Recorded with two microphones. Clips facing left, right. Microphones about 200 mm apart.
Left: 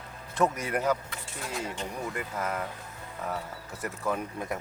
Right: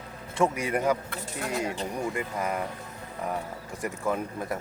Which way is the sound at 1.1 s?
65° right (ahead or behind).